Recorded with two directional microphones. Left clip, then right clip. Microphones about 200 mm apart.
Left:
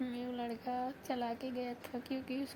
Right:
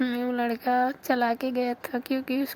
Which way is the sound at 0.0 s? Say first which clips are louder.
Right 13 dB; 25° right (ahead or behind).